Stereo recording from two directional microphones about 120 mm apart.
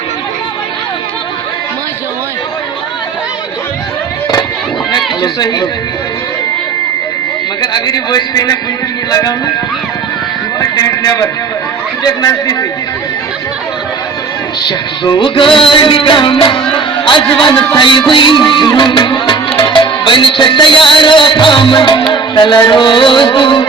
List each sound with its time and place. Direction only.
4.9 s speech: 35° left (ahead or behind)
7.6 s music: 35° left (ahead or behind)
10.6 s a sound: 30° left (ahead or behind)
12.0 s music: 30° left (ahead or behind)
14.7 s music: 40° left (ahead or behind)